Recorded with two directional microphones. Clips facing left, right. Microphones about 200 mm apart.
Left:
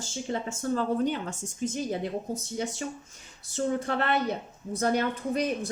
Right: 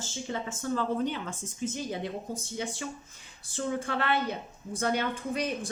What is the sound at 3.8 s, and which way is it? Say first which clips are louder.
Speech: left 2 dB; 40° left (ahead or behind).